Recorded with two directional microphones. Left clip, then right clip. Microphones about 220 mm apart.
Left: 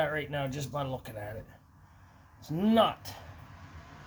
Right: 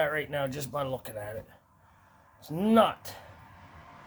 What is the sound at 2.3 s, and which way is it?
Speech, 30° right (ahead or behind).